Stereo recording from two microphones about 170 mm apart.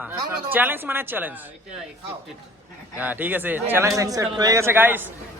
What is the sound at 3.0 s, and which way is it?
A man's voice, 10° right (ahead or behind).